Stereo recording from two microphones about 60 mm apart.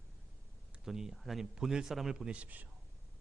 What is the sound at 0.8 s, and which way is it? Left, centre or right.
Speech, centre.